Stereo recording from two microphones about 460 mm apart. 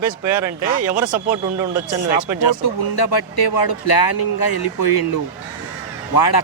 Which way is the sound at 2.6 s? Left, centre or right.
Left.